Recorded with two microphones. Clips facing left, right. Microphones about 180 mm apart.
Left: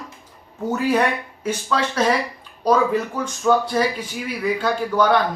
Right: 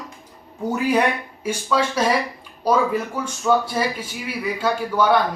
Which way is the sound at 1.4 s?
10° right (ahead or behind).